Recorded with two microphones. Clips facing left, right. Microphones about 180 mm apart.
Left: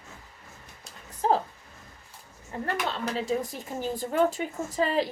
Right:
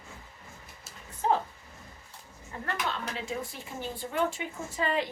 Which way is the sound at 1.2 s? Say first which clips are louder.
Left 3 dB; 35° left (ahead or behind).